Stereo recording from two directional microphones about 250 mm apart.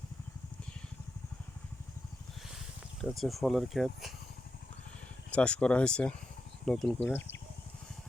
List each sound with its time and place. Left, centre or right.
3.0 s speech: centre
5.3 s speech: centre
7.2 s speech: left